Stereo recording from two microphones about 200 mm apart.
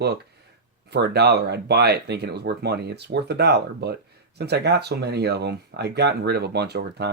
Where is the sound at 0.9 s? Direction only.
55° right (ahead or behind).